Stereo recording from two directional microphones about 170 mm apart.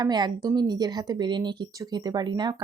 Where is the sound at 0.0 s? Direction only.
25° right (ahead or behind).